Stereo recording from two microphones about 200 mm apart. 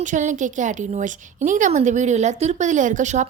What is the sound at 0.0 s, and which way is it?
A woman's voice, 40° right (ahead or behind).